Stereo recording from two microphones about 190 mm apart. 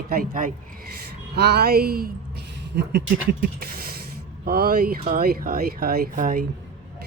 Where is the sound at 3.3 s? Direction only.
50° right (ahead or behind).